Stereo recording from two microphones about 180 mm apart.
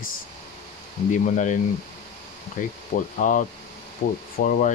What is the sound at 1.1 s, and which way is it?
Speech, 45° left (ahead or behind).